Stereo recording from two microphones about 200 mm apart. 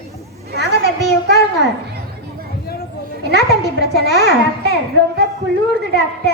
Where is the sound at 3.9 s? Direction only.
55° right (ahead or behind).